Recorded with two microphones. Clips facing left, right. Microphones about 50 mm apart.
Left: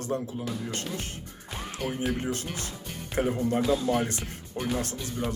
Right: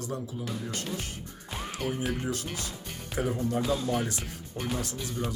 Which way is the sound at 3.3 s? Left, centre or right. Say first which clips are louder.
Left 2 dB; left.